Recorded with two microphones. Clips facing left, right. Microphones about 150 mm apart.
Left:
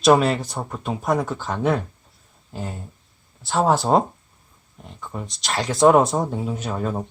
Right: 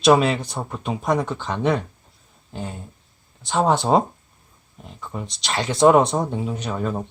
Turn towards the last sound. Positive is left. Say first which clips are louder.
# even
turn(degrees=5)  # may be behind; listen again after turning